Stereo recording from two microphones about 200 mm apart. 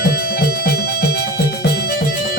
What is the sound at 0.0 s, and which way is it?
Music, 50° left (ahead or behind).